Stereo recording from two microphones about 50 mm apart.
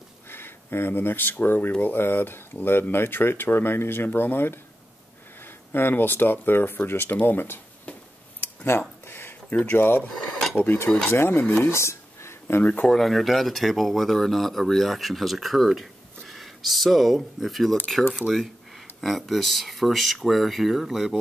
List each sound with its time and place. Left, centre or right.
0.3 s speech: left
8.4 s a sound: left
9.8 s speech: left
10.0 s dishes: centre
10.5 s speech: left
11.1 s speech: left
11.7 s a sound: left
12.8 s speech: centre